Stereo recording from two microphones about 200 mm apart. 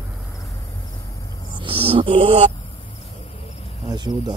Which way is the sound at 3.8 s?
20° right (ahead or behind).